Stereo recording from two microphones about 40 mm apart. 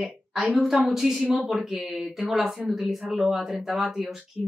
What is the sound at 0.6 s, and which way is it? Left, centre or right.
Speech, centre.